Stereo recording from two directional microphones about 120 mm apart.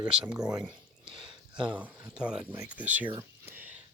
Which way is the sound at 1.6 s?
10° right (ahead or behind).